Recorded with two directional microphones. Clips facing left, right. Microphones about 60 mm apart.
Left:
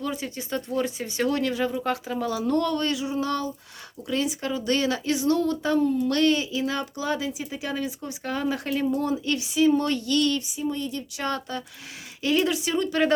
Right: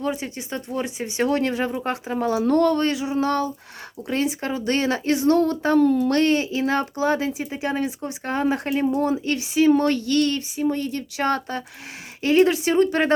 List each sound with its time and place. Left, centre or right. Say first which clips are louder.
0.1 s speech: right 2 dB; right
5.8 s speech: right 5 dB; right
6.1 s speech: right 3 dB; right
9.6 s speech: right 4 dB; right